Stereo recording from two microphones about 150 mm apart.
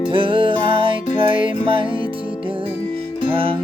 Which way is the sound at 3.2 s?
35° right (ahead or behind).